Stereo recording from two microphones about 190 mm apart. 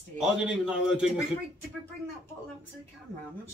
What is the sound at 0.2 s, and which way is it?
Speech, 5° right (ahead or behind).